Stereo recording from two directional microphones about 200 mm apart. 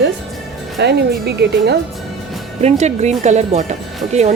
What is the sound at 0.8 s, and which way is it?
Speech, 60° right (ahead or behind).